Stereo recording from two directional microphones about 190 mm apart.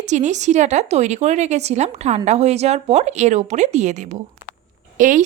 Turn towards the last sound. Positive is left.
turn(degrees=-45)  # may be behind; listen again after turning